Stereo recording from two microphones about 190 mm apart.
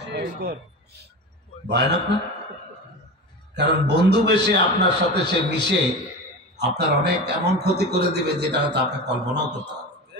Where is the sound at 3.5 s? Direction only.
60° right (ahead or behind).